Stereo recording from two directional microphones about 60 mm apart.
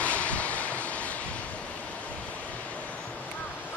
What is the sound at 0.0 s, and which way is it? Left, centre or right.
Vehicle, left.